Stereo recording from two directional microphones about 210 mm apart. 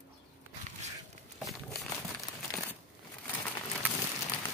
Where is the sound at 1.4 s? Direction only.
Centre (ahead or behind).